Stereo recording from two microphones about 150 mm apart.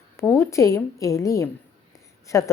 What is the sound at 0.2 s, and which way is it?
A woman's voice, 15° left (ahead or behind).